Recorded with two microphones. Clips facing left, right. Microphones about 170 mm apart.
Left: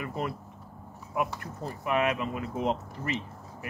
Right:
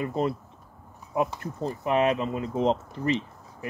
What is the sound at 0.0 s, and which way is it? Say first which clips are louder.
Speech: right 6 dB; 25° right (ahead or behind).